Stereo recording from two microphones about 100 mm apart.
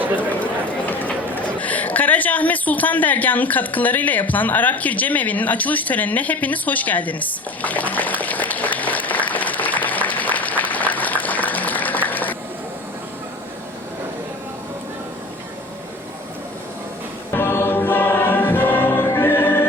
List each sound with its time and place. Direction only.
0.2 s speech: 15° left (ahead or behind)
0.9 s a sound: 15° left (ahead or behind)
17.3 s music: 25° left (ahead or behind)